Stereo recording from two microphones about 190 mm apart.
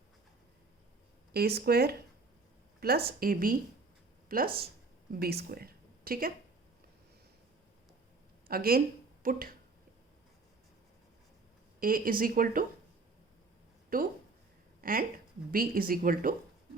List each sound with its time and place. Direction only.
1.3 s a woman's voice: 55° right (ahead or behind)
8.4 s a woman's voice: 50° right (ahead or behind)
11.8 s a woman's voice: 50° right (ahead or behind)
13.9 s a woman's voice: 50° right (ahead or behind)